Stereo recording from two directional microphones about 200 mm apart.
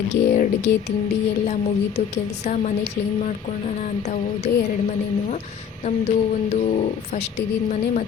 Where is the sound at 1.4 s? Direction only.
35° left (ahead or behind).